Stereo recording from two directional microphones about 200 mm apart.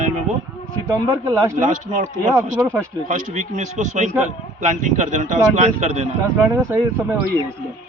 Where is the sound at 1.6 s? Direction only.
40° right (ahead or behind).